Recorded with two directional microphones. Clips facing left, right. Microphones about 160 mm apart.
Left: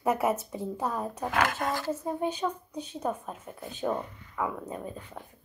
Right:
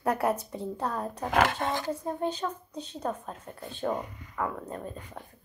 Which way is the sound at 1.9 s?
5° left (ahead or behind).